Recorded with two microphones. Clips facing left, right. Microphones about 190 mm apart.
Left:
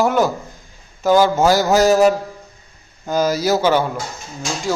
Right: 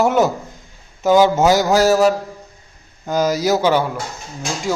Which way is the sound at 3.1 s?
15° right (ahead or behind).